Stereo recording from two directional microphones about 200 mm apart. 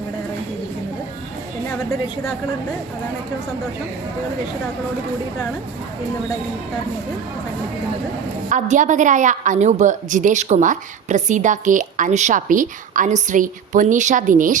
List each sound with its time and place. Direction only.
8.4 s a woman's voice: 40° right (ahead or behind)